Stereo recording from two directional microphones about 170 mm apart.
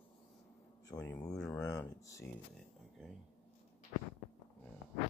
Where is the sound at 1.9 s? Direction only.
20° left (ahead or behind).